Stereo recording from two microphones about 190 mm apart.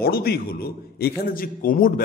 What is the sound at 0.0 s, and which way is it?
A man's voice, 55° left (ahead or behind).